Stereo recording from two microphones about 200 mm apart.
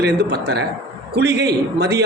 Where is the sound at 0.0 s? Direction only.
55° right (ahead or behind).